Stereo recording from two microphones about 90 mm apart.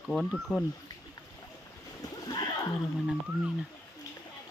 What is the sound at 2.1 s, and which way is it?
Splash, 45° left (ahead or behind).